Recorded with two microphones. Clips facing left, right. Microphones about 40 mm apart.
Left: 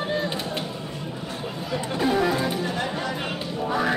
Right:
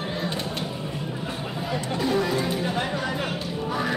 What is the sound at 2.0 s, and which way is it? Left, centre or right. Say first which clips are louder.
Music: left 2 dB; centre.